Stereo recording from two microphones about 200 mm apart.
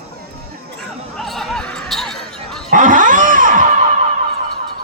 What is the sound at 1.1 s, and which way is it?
Basketball bounce, centre (ahead or behind).